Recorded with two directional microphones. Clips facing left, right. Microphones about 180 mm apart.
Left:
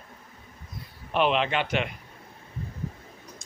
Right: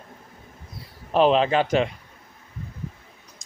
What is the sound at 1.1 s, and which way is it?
Speech, 35° right (ahead or behind).